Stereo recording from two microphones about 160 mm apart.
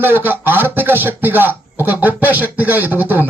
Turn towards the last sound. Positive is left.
turn(degrees=-10)  # may be behind; listen again after turning